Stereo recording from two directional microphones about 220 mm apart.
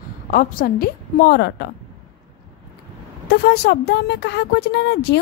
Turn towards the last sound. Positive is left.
turn(degrees=50)  # may be behind; listen again after turning